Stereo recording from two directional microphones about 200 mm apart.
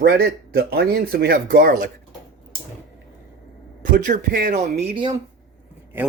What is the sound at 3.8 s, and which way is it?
Speech, 40° right (ahead or behind).